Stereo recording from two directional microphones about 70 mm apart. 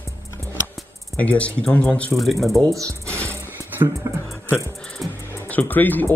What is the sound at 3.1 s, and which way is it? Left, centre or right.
Music, left.